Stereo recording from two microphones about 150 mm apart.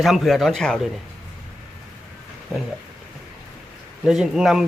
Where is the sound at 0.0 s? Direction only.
Centre (ahead or behind).